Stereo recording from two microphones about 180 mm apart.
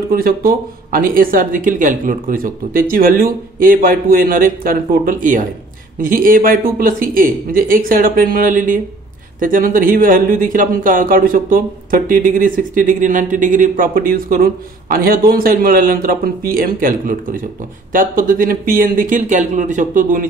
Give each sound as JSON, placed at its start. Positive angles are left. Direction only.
{"t": 0.1, "sound": "speech", "side_deg": -55}